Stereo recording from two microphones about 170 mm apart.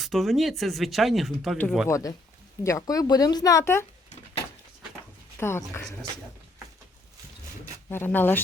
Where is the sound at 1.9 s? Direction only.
20° left (ahead or behind).